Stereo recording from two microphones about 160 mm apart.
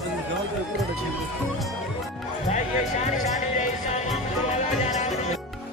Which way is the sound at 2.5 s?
50° left (ahead or behind).